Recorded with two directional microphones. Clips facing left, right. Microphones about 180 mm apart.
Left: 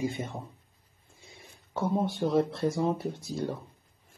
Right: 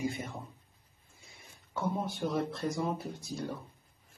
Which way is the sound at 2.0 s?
Centre (ahead or behind).